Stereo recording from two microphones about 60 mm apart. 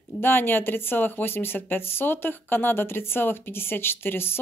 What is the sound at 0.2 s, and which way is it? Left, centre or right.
Speech, left.